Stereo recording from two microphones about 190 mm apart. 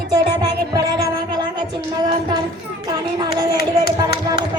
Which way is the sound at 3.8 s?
55° left (ahead or behind).